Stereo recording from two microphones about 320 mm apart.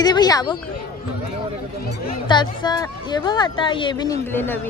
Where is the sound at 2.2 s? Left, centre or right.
Centre.